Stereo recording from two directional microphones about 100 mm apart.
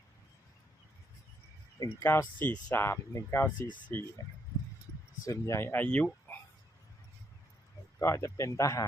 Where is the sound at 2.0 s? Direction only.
20° left (ahead or behind).